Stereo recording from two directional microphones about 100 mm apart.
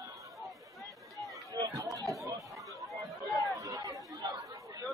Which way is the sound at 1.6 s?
35° right (ahead or behind).